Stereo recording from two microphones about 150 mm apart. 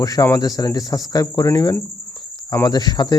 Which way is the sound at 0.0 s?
25° left (ahead or behind).